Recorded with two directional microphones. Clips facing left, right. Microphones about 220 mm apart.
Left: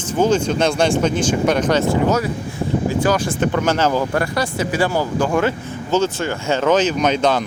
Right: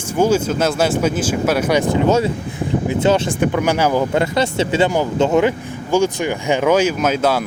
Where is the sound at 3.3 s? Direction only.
10° right (ahead or behind).